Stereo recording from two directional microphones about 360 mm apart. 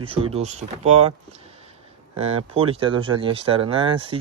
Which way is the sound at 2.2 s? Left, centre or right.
Centre.